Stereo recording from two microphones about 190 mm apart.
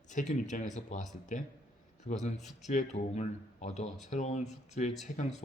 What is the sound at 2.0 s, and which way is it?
Speech, 40° left (ahead or behind).